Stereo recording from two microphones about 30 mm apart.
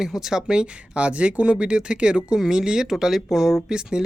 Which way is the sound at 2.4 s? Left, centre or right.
Right.